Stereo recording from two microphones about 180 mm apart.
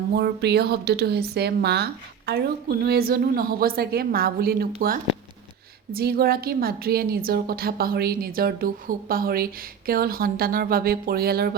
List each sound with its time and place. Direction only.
0.1 s a woman's voice: 65° right (ahead or behind)